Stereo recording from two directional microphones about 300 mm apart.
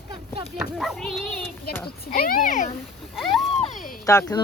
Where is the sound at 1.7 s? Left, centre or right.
Left.